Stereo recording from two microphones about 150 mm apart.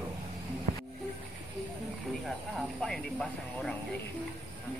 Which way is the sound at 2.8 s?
5° left (ahead or behind).